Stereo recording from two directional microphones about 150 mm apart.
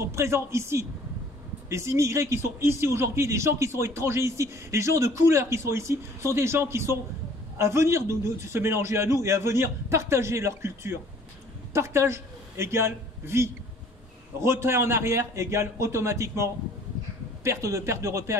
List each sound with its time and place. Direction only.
0.0 s a man's voice: 20° right (ahead or behind)